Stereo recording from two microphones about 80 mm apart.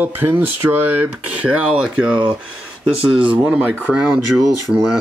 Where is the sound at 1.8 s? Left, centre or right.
Centre.